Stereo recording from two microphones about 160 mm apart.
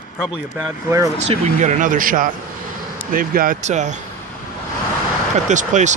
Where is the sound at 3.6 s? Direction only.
50° right (ahead or behind).